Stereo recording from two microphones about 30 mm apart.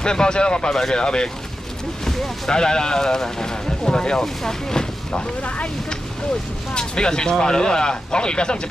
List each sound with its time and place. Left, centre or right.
0.0 s speech: left
0.7 s speech: centre
1.0 s speech: left
2.0 s a sound: centre
2.5 s speech: left
4.2 s speech: centre
6.7 s speech: left